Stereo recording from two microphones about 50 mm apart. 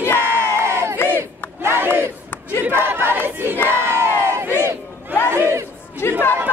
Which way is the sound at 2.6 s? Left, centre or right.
Right.